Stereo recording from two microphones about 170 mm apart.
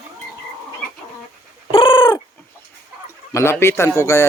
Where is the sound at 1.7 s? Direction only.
30° left (ahead or behind).